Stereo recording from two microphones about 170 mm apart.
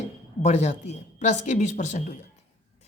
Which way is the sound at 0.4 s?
40° left (ahead or behind).